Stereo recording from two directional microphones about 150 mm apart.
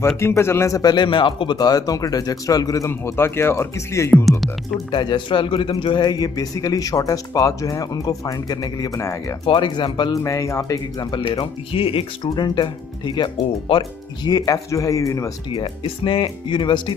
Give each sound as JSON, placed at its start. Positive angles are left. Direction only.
{"t": 0.2, "sound": "speech", "side_deg": 15}
{"t": 4.3, "sound": "speech", "side_deg": 0}
{"t": 4.9, "sound": "speech", "side_deg": 30}
{"t": 9.5, "sound": "speech", "side_deg": 30}
{"t": 15.6, "sound": "speech", "side_deg": 35}